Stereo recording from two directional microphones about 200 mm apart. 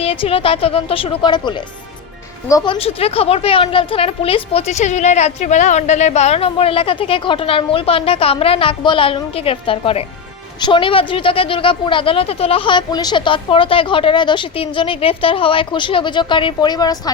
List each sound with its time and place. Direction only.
0.0 s a woman's voice: 30° left (ahead or behind)
2.7 s a woman's voice: 30° left (ahead or behind)